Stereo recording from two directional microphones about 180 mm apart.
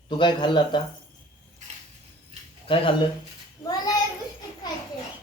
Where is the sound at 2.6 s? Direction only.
30° left (ahead or behind).